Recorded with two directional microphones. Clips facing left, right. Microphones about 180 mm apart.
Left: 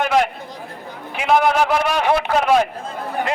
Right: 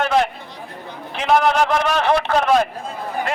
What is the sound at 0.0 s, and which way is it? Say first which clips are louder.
Chatter: even; 10° left (ahead or behind).